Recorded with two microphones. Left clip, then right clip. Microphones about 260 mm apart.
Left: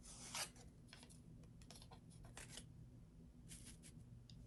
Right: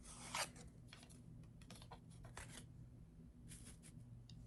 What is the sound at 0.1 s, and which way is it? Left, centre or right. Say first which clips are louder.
Filing: right 4 dB; right.